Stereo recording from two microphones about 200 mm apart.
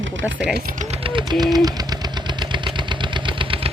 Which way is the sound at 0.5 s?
45° right (ahead or behind).